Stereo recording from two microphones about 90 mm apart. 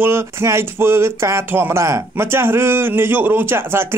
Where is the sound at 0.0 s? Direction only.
30° right (ahead or behind).